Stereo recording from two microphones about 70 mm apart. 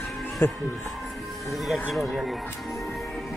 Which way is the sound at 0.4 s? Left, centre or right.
Left.